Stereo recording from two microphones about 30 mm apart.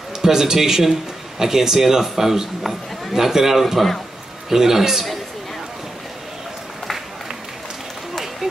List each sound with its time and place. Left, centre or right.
0.2 s a man's voice: centre
8.1 s run: centre